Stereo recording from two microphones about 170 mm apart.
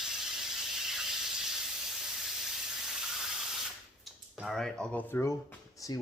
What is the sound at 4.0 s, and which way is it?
Speech, centre (ahead or behind).